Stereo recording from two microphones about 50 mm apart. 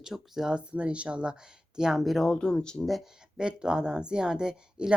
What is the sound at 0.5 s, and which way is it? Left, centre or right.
Speech, right.